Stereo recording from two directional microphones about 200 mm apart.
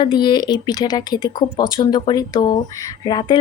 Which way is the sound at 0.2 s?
20° left (ahead or behind).